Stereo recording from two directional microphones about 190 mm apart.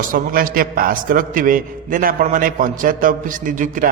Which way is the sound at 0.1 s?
50° right (ahead or behind).